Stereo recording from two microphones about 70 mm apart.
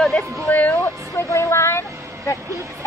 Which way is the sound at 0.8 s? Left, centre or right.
Left.